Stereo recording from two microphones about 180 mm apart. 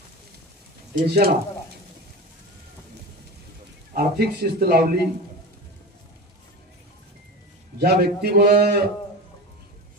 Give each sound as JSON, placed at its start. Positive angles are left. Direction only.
{"t": 1.0, "sound": "speech", "side_deg": -60}
{"t": 3.9, "sound": "speech", "side_deg": -60}
{"t": 7.8, "sound": "speech", "side_deg": -60}